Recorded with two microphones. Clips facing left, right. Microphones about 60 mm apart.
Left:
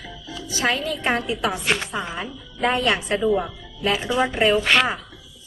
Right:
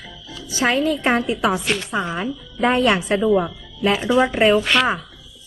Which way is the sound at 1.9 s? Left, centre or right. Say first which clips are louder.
Right 5 dB; centre.